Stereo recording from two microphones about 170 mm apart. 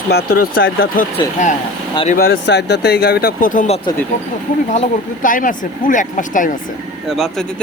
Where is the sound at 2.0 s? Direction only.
60° left (ahead or behind).